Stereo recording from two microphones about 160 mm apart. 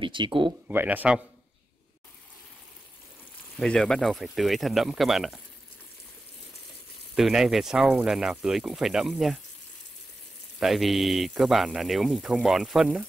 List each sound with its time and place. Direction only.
0.0 s speech: 30° right (ahead or behind)
0.7 s speech: 10° right (ahead or behind)
3.5 s speech: 5° left (ahead or behind)
7.2 s speech: centre (ahead or behind)
10.6 s speech: centre (ahead or behind)